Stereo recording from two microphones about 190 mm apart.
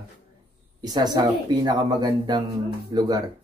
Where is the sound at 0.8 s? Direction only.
20° right (ahead or behind).